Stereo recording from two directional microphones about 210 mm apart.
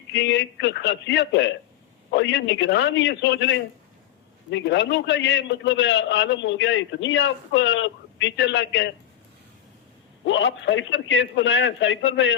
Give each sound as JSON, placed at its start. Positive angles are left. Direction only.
{"t": 0.1, "sound": "a man's voice", "side_deg": 55}
{"t": 10.2, "sound": "a man's voice", "side_deg": 65}